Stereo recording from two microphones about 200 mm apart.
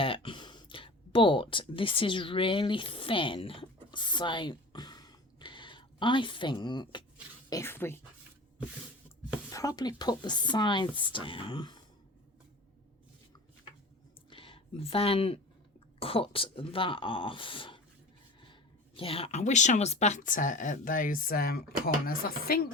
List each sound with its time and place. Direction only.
0.0 s speech: 25° left (ahead or behind)
7.5 s speech: 10° left (ahead or behind)
9.5 s speech: 20° left (ahead or behind)
14.3 s a sound: 25° left (ahead or behind)
16.0 s speech: 30° left (ahead or behind)
18.9 s speech: 30° left (ahead or behind); by 22.7 s 50° left (ahead or behind)